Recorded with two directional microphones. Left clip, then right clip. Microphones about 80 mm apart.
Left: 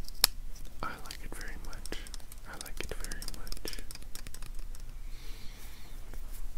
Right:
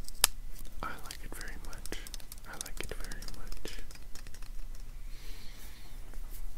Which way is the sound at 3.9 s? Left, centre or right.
Centre.